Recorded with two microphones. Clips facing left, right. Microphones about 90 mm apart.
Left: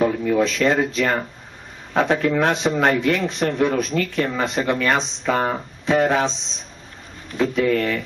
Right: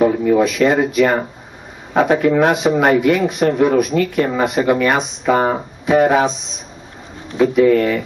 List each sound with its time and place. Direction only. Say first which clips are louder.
0.0 s speech: right 5 dB; 20° right (ahead or behind)
7.3 s speech: right 7 dB; 15° right (ahead or behind)